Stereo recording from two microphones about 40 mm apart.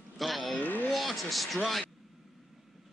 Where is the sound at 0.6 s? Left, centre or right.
Left.